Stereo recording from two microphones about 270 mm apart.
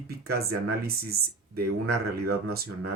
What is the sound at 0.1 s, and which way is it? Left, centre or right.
Speech, right.